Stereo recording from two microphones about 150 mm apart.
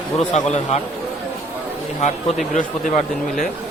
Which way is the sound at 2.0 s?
50° left (ahead or behind).